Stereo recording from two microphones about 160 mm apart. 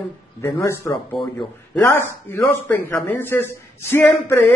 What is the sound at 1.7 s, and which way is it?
Speech, 10° left (ahead or behind).